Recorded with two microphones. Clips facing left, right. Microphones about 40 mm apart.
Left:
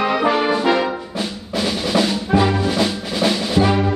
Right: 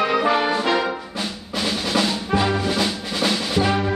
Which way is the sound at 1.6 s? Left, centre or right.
Centre.